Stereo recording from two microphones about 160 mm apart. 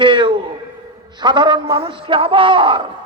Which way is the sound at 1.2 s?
30° right (ahead or behind).